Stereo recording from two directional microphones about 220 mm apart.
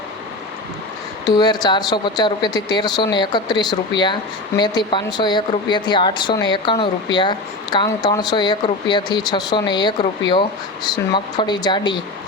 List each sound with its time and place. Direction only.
1.4 s speech: 20° left (ahead or behind)